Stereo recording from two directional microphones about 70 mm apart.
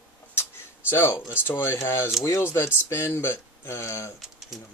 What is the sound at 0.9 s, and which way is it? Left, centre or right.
Speech, left.